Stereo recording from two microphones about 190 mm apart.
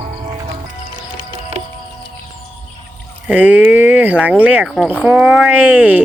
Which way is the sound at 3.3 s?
10° right (ahead or behind).